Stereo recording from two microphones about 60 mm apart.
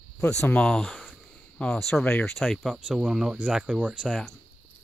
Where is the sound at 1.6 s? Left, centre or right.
Centre.